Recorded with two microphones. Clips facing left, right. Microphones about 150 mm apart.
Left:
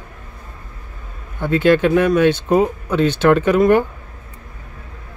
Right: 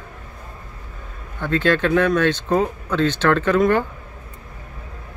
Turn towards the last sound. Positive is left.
turn(degrees=15)  # may be behind; listen again after turning